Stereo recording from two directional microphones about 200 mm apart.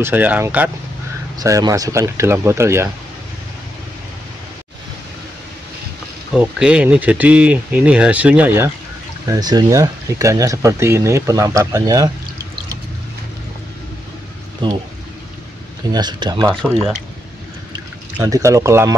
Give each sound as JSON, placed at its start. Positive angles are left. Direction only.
{"t": 0.0, "sound": "speech", "side_deg": -10}
{"t": 6.3, "sound": "speech", "side_deg": -5}
{"t": 14.6, "sound": "speech", "side_deg": -25}
{"t": 15.9, "sound": "speech", "side_deg": -20}
{"t": 18.1, "sound": "speech", "side_deg": -15}